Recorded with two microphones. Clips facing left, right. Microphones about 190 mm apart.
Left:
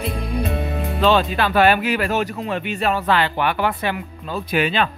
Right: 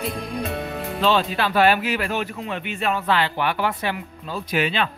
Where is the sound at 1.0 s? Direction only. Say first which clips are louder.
Left 3 dB; 55° left (ahead or behind).